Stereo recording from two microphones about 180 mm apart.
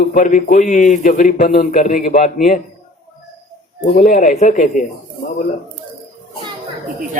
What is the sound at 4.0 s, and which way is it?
Speech, 45° left (ahead or behind).